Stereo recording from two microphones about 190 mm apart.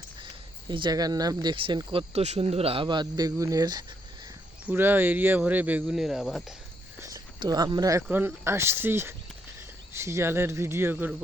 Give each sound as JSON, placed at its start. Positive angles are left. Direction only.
{"t": 0.7, "sound": "speech", "side_deg": -25}
{"t": 7.0, "sound": "a sound", "side_deg": -20}
{"t": 8.1, "sound": "speech", "side_deg": -10}